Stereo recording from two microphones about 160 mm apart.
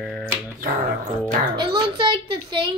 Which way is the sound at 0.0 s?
Centre (ahead or behind).